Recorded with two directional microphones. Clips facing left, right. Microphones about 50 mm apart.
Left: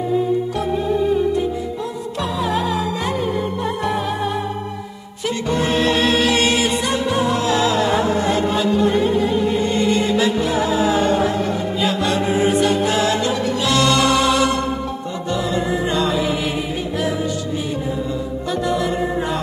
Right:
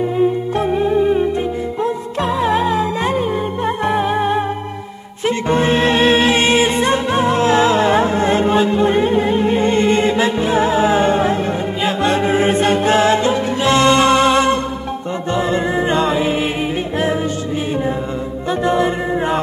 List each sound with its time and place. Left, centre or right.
0.6 s music: right
18.5 s music: right